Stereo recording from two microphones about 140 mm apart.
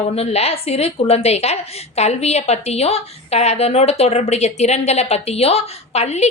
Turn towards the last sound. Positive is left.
turn(degrees=50)  # may be behind; listen again after turning